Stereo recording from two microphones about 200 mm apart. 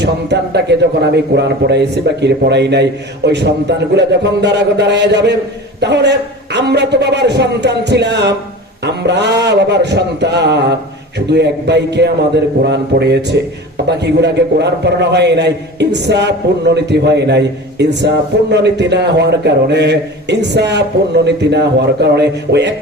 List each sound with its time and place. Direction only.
0.0 s a man's voice: 60° right (ahead or behind)